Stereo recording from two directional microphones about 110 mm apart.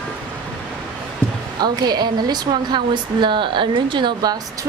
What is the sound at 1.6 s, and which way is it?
Speech, 40° right (ahead or behind).